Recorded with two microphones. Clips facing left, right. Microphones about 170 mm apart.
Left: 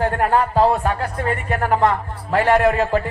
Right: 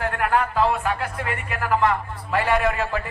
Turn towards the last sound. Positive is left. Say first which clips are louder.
# left 6 dB
turn(degrees=40)  # may be behind; listen again after turning